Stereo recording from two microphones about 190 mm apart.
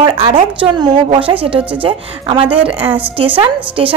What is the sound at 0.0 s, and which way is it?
A woman's voice, 25° right (ahead or behind).